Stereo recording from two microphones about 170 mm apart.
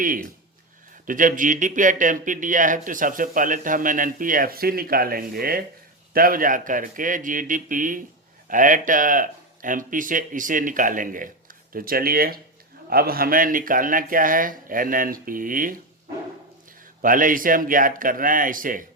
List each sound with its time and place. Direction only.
0.0 s speech: 55° right (ahead or behind)
17.0 s speech: 55° right (ahead or behind)